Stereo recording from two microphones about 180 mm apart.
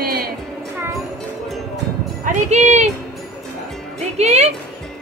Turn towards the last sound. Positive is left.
turn(degrees=-40)  # may be behind; listen again after turning